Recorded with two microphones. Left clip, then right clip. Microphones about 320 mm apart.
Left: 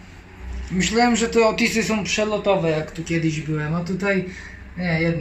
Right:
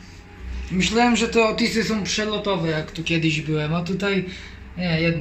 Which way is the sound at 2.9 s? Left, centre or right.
Centre.